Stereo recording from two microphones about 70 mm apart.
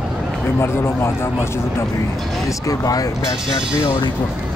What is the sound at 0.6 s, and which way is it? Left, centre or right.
Speech, left.